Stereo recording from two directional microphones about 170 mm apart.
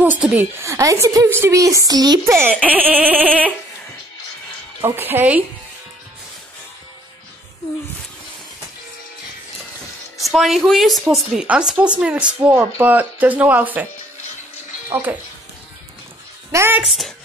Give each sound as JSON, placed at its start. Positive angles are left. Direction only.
{"t": 0.0, "sound": "speech", "side_deg": -10}
{"t": 4.8, "sound": "speech", "side_deg": -15}
{"t": 10.3, "sound": "speech", "side_deg": 0}
{"t": 14.9, "sound": "speech", "side_deg": -10}
{"t": 16.5, "sound": "speech", "side_deg": -15}
{"t": 16.8, "sound": "speech", "side_deg": 0}